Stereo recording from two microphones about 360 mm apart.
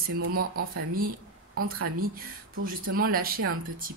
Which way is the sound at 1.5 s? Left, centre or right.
Right.